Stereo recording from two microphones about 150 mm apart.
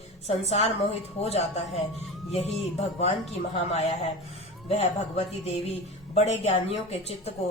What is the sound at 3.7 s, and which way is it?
Speech, 45° left (ahead or behind).